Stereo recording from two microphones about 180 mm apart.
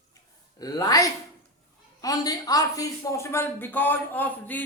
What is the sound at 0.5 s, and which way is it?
A man's voice, 20° left (ahead or behind).